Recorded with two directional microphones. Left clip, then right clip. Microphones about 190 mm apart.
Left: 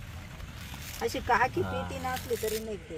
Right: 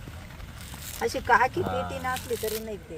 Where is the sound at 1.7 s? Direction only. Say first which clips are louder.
Right 4 dB; 5° right (ahead or behind).